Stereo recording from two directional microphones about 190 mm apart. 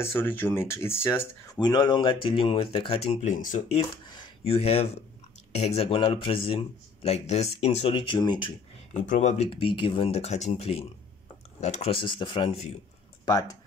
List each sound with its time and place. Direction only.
0.0 s speech: 10° left (ahead or behind); by 3.8 s 35° left (ahead or behind)
4.0 s speech: 25° left (ahead or behind)
8.9 s speech: 40° left (ahead or behind); by 13.6 s 20° left (ahead or behind)